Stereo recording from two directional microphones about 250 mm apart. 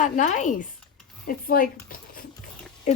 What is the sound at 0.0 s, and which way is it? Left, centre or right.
Speech, left.